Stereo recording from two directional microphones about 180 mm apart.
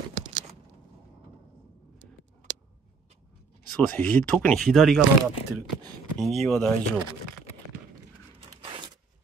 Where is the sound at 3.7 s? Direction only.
10° left (ahead or behind).